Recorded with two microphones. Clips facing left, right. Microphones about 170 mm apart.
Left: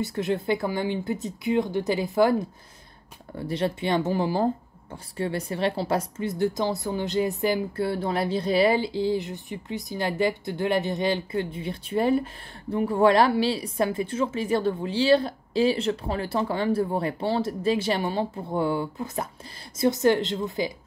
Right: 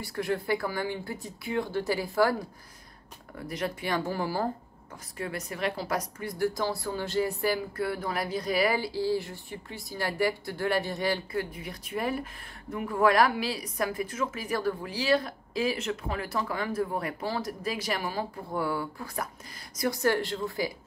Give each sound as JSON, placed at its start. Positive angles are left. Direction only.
{"t": 0.0, "sound": "a woman's voice", "side_deg": 20}